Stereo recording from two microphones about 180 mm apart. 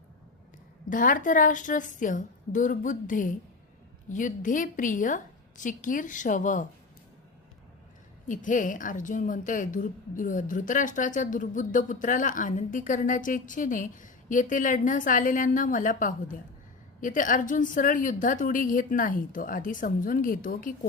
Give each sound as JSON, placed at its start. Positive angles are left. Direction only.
{"t": 0.9, "sound": "a woman's voice", "side_deg": 50}
{"t": 8.3, "sound": "a woman's voice", "side_deg": 45}